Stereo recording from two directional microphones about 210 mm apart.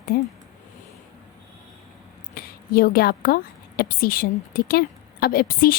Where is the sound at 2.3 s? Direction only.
45° left (ahead or behind).